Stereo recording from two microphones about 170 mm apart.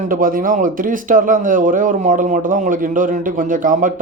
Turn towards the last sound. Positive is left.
turn(degrees=-50)  # may be behind; listen again after turning